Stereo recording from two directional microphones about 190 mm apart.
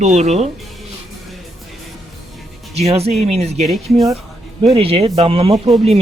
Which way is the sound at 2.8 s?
35° right (ahead or behind).